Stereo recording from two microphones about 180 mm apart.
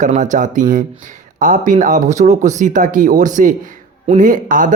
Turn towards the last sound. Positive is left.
turn(degrees=-45)  # may be behind; listen again after turning